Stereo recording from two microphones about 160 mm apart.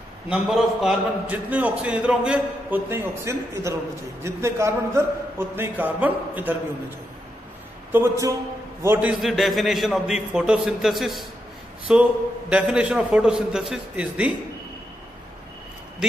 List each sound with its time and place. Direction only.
0.3 s a man's voice: centre (ahead or behind)
7.9 s a man's voice: 20° right (ahead or behind)
9.1 s a man's voice: centre (ahead or behind)
16.0 s speech: 5° right (ahead or behind)